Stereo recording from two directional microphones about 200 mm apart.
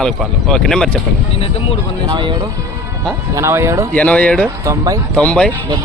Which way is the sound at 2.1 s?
25° right (ahead or behind).